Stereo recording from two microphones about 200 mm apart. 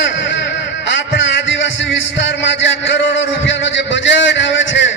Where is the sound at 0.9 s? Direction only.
65° left (ahead or behind).